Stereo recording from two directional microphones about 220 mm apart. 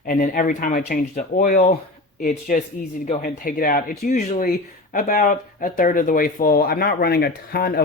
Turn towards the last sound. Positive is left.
turn(degrees=45)  # may be behind; listen again after turning